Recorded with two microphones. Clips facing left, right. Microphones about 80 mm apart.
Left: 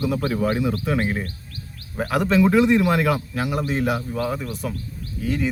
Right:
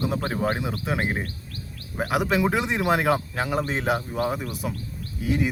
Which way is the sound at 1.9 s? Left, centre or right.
Centre.